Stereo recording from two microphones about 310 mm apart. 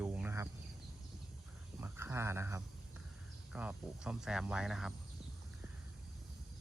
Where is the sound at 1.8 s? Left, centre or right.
Centre.